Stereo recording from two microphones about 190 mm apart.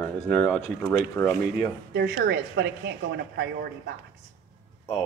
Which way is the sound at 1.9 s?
60° right (ahead or behind).